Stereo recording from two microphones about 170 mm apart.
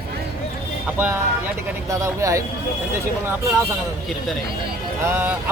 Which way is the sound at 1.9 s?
20° right (ahead or behind).